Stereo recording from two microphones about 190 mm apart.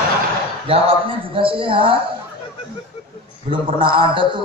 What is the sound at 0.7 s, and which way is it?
A man's voice, 30° right (ahead or behind).